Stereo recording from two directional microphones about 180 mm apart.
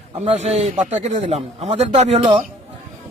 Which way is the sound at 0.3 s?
35° right (ahead or behind).